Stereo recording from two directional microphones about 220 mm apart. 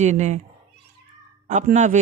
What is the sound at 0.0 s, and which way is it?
Speech, 30° right (ahead or behind).